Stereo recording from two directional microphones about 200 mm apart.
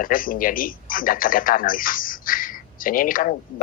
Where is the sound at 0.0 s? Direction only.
45° left (ahead or behind).